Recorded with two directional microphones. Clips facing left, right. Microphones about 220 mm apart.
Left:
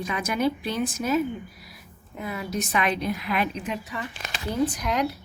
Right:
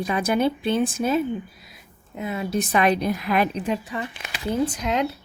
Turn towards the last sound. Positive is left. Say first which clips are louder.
# right 2 dB
turn(degrees=-25)  # may be behind; listen again after turning